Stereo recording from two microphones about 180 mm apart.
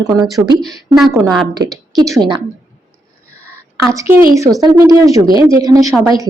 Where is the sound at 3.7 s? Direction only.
15° right (ahead or behind).